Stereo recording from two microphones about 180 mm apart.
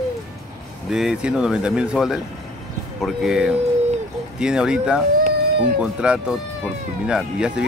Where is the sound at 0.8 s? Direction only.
Centre (ahead or behind).